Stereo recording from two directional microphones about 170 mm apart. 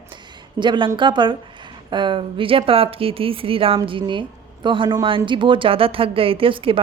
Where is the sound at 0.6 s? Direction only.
25° right (ahead or behind).